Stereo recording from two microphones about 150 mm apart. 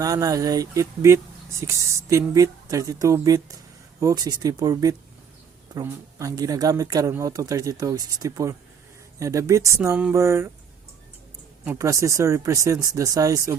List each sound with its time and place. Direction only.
0.0 s speech: 25° right (ahead or behind)
9.9 s speech: 5° right (ahead or behind)
10.2 s speech: 20° right (ahead or behind)
11.6 s speech: 15° right (ahead or behind)